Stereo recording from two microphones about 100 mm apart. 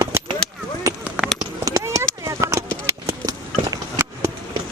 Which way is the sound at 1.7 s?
35° right (ahead or behind).